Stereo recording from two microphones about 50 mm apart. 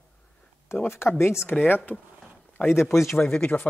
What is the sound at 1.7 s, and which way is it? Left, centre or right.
Speech, left.